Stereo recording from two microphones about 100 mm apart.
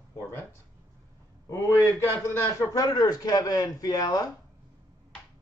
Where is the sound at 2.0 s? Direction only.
25° left (ahead or behind).